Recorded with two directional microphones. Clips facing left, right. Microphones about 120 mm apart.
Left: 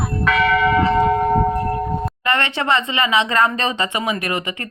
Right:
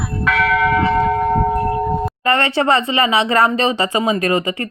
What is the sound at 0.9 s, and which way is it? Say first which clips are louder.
Church bell: even; 10° left (ahead or behind).